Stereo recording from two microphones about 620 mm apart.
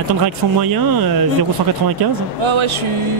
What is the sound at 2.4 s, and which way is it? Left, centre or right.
Speech, right.